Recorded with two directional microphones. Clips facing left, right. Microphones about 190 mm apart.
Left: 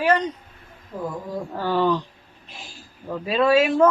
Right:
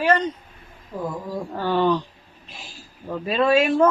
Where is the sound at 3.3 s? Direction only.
5° left (ahead or behind).